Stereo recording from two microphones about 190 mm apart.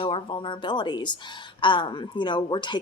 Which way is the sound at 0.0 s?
25° left (ahead or behind).